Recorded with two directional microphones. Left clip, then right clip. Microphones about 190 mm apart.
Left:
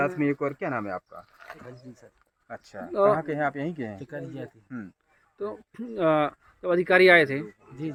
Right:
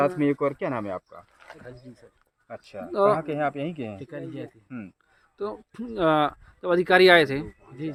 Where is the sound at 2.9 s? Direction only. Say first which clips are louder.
Even; 15° right (ahead or behind).